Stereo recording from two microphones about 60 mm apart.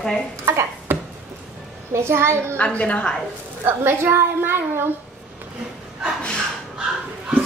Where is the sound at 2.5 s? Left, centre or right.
Left.